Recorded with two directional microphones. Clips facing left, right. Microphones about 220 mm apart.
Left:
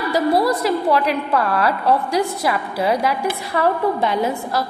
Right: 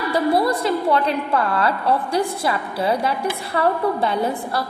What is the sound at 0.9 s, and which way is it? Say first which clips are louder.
A woman's voice: left 1 dB; 25° right (ahead or behind).